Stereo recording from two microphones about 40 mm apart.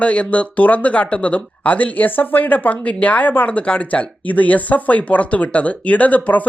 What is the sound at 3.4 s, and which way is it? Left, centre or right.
Speech, left.